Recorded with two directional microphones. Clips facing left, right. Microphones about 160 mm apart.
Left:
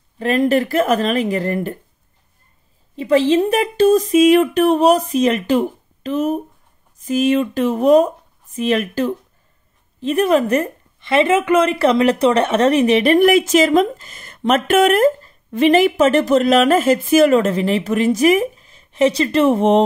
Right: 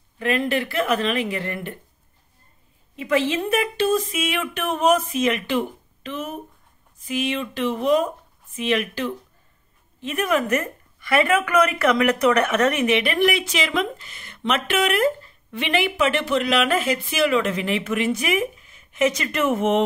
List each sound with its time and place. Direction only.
0.2 s a woman's voice: 40° left (ahead or behind)
3.0 s a woman's voice: 35° left (ahead or behind)